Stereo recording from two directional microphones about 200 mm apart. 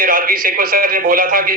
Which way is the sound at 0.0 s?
45° right (ahead or behind).